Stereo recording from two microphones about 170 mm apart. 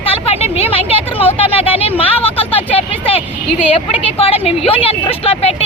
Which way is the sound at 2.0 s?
35° left (ahead or behind).